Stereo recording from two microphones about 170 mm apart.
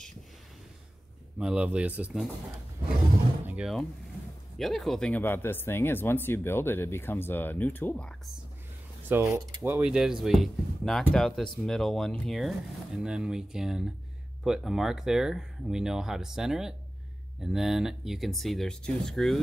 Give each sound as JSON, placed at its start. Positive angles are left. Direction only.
{"t": 1.4, "sound": "speech", "side_deg": -5}
{"t": 3.4, "sound": "speech", "side_deg": -5}
{"t": 9.1, "sound": "speech", "side_deg": -15}